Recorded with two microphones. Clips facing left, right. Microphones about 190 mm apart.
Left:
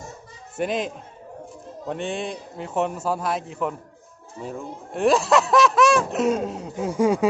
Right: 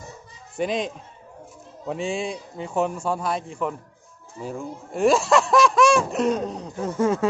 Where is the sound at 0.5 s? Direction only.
5° left (ahead or behind).